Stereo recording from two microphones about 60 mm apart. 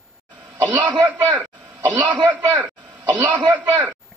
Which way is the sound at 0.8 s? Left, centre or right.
Right.